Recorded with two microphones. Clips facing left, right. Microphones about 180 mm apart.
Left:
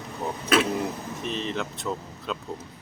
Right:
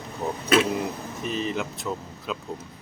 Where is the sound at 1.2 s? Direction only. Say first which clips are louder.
Right 2 dB; 5° right (ahead or behind).